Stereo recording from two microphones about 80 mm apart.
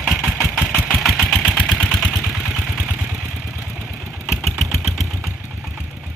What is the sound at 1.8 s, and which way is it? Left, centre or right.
Vehicle, centre.